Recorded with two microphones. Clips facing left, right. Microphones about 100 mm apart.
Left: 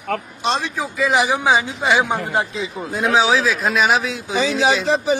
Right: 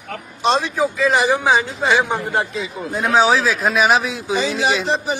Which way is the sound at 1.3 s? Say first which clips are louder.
Right 1 dB; 15° left (ahead or behind).